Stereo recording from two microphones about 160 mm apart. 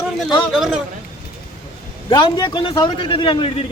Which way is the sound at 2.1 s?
25° left (ahead or behind).